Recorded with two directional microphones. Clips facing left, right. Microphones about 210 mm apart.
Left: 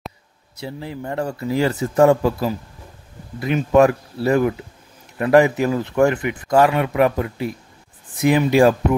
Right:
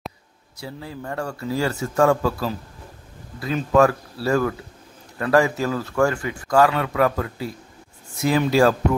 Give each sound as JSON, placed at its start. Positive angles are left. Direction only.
{"t": 0.6, "sound": "speech", "side_deg": 25}
{"t": 3.7, "sound": "speech", "side_deg": 20}